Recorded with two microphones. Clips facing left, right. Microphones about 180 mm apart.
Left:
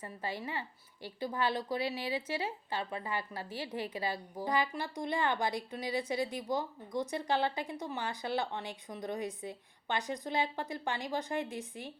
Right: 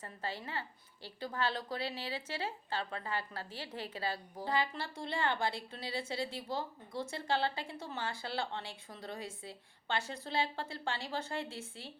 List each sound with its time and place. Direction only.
0.0 s speech: 10° left (ahead or behind)